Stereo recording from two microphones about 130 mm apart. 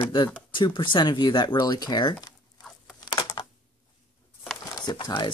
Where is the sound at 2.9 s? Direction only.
30° left (ahead or behind).